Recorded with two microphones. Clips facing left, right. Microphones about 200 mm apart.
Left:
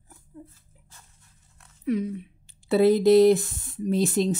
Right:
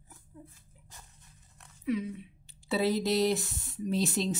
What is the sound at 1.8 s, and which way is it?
Speech, 50° left (ahead or behind).